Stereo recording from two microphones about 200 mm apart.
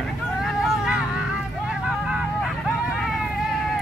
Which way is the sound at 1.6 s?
5° right (ahead or behind).